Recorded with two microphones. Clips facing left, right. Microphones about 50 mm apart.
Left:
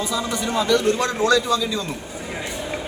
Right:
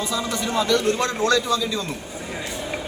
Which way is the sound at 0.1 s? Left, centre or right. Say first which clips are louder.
Left 1 dB; centre.